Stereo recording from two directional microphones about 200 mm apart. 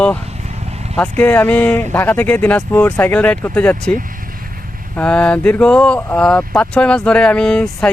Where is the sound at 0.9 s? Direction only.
10° left (ahead or behind).